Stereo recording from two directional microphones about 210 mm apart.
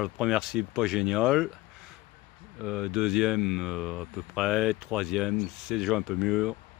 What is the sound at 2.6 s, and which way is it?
Speech, 5° right (ahead or behind).